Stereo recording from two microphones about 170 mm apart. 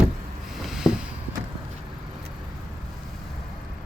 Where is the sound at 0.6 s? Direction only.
Centre (ahead or behind).